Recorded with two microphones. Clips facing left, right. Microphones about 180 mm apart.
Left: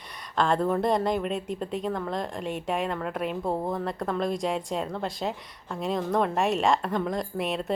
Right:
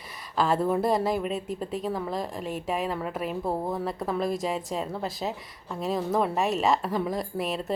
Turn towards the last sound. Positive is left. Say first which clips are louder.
# left 1 dB
turn(degrees=0)  # may be behind; listen again after turning